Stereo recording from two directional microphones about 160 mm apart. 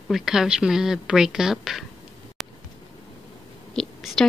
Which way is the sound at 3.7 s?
Centre (ahead or behind).